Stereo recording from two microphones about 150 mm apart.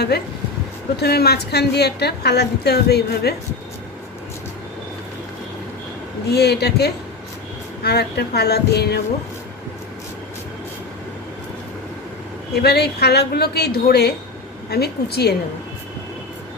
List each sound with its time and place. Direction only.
0.1 s a woman's voice: 90° left
6.2 s a woman's voice: 90° left
12.5 s a woman's voice: 90° left